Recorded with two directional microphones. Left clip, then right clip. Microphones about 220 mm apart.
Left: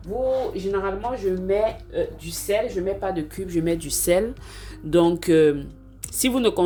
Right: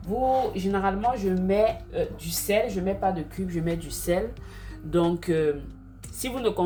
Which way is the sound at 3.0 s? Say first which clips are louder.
Even; 35° left (ahead or behind).